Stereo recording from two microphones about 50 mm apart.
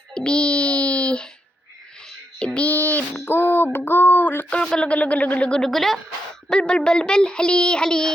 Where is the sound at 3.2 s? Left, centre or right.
Left.